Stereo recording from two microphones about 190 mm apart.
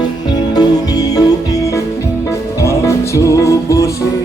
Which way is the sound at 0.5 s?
20° left (ahead or behind).